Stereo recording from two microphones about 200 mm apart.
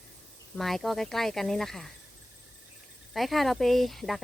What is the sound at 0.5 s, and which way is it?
Speech, centre (ahead or behind).